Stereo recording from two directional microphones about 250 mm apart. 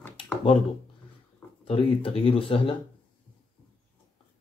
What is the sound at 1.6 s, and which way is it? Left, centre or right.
Speech, left.